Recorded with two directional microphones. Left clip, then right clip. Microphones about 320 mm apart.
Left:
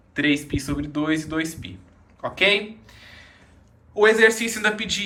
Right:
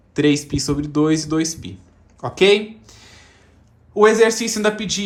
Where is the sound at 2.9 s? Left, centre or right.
Right.